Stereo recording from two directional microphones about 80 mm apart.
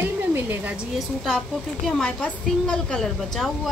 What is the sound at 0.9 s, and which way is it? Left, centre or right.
A woman's voice, centre.